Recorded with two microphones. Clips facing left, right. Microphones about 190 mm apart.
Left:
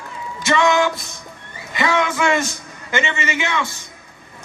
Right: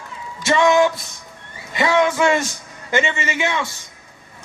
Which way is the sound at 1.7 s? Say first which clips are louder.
Right 3 dB; 35° right (ahead or behind).